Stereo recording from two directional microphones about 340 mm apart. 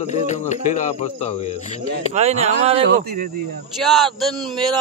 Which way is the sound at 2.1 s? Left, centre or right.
Centre.